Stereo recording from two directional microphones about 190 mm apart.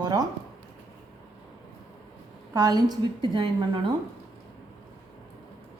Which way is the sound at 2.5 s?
20° right (ahead or behind).